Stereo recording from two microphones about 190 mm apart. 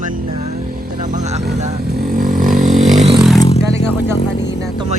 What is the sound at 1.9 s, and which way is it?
Vehicle, 50° right (ahead or behind).